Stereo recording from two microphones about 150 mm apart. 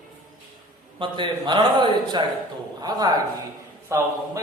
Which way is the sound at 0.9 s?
35° right (ahead or behind).